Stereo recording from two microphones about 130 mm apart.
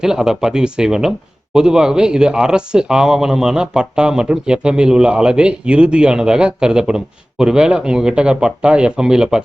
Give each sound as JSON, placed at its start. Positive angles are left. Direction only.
{"t": 0.0, "sound": "speech", "side_deg": -5}